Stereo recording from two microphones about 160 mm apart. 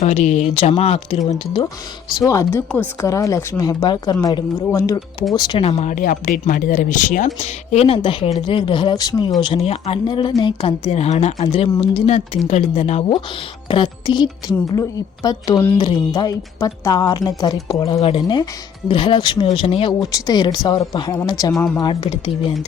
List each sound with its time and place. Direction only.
0.0 s speech: 45° left (ahead or behind)
2.1 s speech: 20° left (ahead or behind)
5.6 s a woman's voice: 40° left (ahead or behind)
5.9 s speech: 60° left (ahead or behind)
7.4 s a woman's voice: 40° left (ahead or behind); by 9.3 s 25° left (ahead or behind)
9.4 s a woman's voice: 35° left (ahead or behind)
13.7 s a woman's voice: 30° left (ahead or behind)